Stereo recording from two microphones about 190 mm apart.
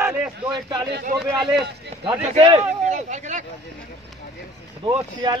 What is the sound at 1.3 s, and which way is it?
Speech, centre (ahead or behind).